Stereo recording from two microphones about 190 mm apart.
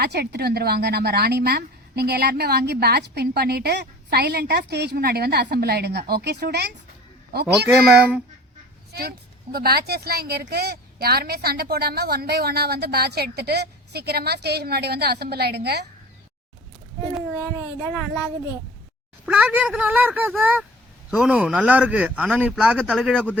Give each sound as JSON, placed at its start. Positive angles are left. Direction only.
{"t": 0.0, "sound": "speech", "side_deg": -60}
{"t": 7.7, "sound": "speech", "side_deg": -10}
{"t": 8.9, "sound": "speech", "side_deg": -55}
{"t": 17.7, "sound": "speech", "side_deg": 20}
{"t": 19.2, "sound": "speech", "side_deg": -5}